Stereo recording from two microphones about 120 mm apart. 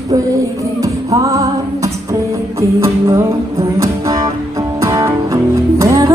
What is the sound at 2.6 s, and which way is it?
Music, 20° right (ahead or behind).